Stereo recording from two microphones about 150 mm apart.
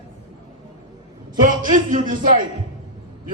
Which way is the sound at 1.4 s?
60° right (ahead or behind).